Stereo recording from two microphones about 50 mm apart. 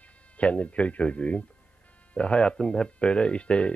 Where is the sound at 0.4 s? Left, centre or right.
Left.